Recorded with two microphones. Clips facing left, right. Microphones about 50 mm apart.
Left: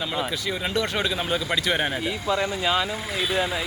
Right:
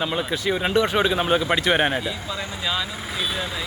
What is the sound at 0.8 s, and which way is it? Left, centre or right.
Speech, right.